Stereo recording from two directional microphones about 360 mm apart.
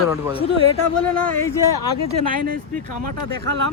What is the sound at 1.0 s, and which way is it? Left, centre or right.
Speech, centre.